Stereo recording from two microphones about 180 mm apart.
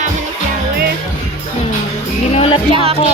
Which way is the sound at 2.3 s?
30° left (ahead or behind).